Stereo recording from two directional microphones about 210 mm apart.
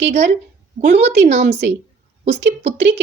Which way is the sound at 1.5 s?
55° right (ahead or behind).